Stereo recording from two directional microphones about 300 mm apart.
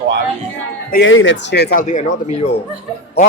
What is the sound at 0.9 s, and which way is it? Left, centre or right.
A man's voice, left.